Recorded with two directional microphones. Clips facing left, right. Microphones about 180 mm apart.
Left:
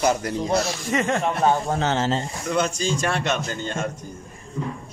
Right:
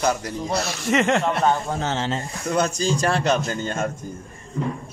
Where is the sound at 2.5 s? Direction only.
40° right (ahead or behind).